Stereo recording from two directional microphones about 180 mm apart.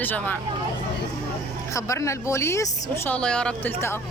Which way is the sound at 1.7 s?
15° left (ahead or behind).